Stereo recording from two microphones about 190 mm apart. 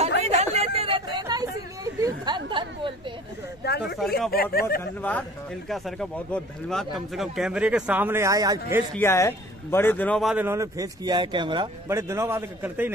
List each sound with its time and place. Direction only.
0.2 s a sound: 35° right (ahead or behind)
1.1 s hubbub: 20° right (ahead or behind)
2.0 s a sound: 20° right (ahead or behind)
3.8 s a man's voice: centre (ahead or behind)
4.3 s speech: 50° left (ahead or behind)
5.7 s a man's voice: centre (ahead or behind); by 8.8 s 15° right (ahead or behind)
8.9 s a man's voice: 15° left (ahead or behind)
10.3 s speech: 15° right (ahead or behind)